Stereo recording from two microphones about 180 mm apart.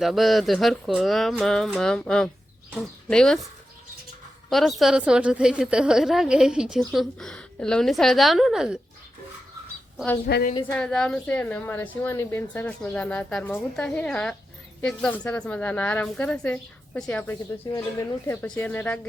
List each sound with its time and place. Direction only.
0.0 s a woman's voice: centre (ahead or behind)
4.4 s a woman's voice: centre (ahead or behind)
10.3 s a woman's voice: 70° left (ahead or behind)
10.7 s a woman's voice: 5° left (ahead or behind)